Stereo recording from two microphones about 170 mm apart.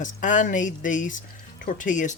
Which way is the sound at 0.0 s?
50° left (ahead or behind).